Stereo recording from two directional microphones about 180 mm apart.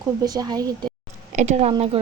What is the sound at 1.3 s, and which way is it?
Speech, 40° right (ahead or behind).